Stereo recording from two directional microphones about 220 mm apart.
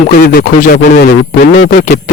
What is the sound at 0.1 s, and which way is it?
Speech, 40° left (ahead or behind).